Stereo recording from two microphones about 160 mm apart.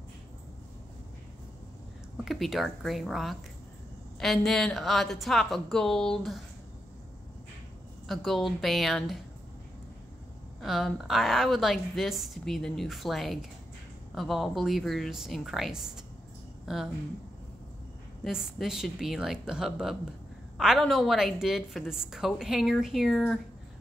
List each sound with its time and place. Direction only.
2.2 s a woman's voice: centre (ahead or behind)
8.1 s a woman's voice: centre (ahead or behind)
10.6 s a woman's voice: centre (ahead or behind)
18.2 s a woman's voice: 5° right (ahead or behind)